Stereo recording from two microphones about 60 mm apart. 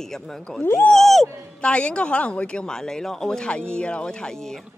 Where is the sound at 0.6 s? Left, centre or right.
Left.